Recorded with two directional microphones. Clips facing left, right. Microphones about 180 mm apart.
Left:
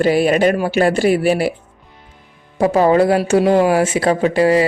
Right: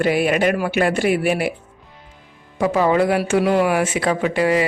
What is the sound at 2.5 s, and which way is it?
Speech, 40° left (ahead or behind).